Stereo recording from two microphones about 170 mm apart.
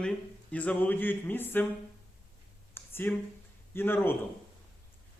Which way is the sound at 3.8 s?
15° left (ahead or behind).